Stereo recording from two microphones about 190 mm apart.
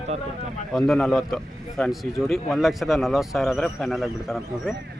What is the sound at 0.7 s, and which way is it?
A man's voice, centre (ahead or behind).